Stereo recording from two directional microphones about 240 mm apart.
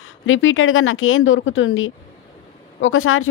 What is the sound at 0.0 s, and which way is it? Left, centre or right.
A woman's voice, left.